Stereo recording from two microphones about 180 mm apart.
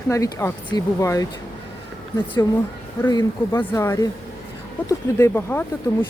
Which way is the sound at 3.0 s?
15° left (ahead or behind).